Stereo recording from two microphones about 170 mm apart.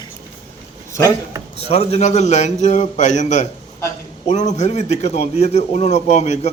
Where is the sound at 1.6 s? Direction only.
40° left (ahead or behind).